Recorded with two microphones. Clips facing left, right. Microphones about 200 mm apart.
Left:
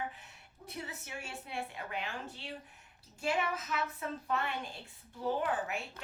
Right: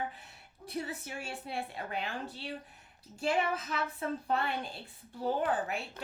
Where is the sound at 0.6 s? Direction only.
35° right (ahead or behind).